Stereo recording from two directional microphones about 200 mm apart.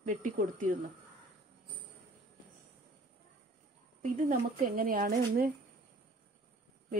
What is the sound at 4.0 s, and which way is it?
A woman's voice, 40° right (ahead or behind).